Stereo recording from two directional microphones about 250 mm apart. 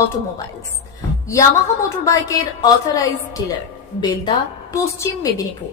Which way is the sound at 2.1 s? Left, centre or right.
Centre.